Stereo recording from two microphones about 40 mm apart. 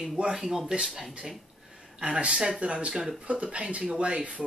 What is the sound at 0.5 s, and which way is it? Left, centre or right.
Speech, centre.